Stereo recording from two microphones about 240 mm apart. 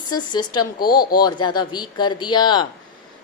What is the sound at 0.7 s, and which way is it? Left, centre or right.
Speech, left.